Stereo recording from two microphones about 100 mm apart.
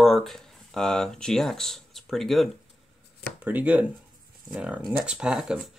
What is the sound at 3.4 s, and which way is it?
Speech, 15° right (ahead or behind).